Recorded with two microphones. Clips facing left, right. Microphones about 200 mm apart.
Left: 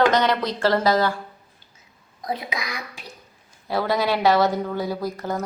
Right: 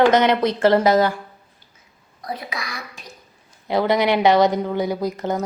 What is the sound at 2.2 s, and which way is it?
Speech, 20° left (ahead or behind).